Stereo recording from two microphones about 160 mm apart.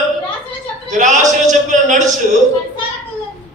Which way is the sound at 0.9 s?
50° right (ahead or behind).